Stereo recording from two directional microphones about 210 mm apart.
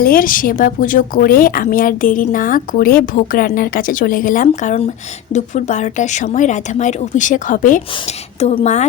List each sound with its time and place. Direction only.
0.0 s a woman's voice: 40° left (ahead or behind)